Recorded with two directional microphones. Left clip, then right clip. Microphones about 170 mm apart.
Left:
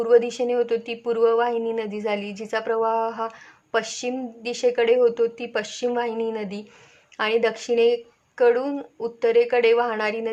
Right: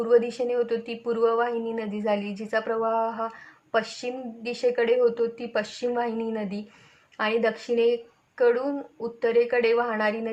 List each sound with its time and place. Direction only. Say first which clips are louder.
0.0 s speech: left 3 dB; 25° left (ahead or behind)